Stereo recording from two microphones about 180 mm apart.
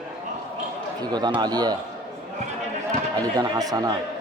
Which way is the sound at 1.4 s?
20° right (ahead or behind).